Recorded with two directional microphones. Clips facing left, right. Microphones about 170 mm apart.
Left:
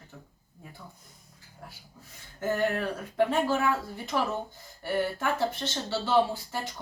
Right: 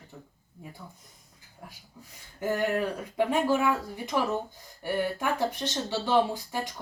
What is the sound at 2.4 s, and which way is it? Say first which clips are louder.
Speech: right 1 dB; 15° right (ahead or behind).